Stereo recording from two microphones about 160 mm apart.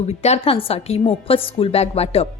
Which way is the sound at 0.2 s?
40° left (ahead or behind).